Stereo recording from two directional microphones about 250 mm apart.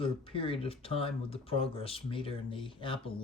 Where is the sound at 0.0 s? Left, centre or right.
Left.